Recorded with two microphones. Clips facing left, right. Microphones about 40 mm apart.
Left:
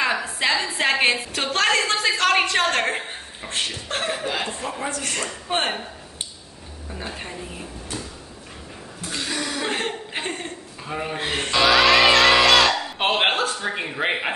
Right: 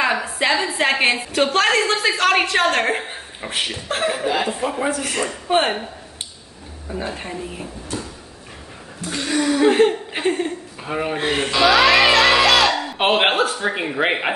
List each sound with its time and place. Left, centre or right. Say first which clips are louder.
0.0 s a woman's voice: right 3 dB; centre
6.9 s a woman's voice: right 6 dB; centre
9.1 s speech: right 8 dB; centre
10.8 s speech: right 5 dB; centre
12.8 s speech: right 4 dB; centre